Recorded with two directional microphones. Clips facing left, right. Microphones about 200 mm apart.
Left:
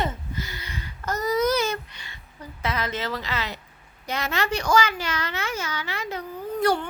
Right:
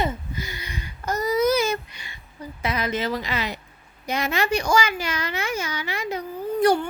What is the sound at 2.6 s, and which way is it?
A child's voice, 15° right (ahead or behind).